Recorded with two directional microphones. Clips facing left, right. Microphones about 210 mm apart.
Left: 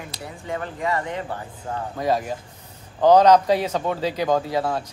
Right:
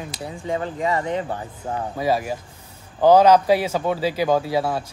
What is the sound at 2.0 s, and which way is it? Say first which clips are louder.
Speech: even; 10° right (ahead or behind).